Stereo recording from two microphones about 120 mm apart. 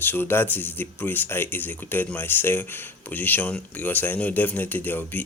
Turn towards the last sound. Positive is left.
turn(degrees=15)  # may be behind; listen again after turning